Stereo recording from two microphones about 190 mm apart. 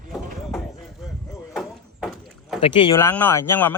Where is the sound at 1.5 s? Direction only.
5° right (ahead or behind).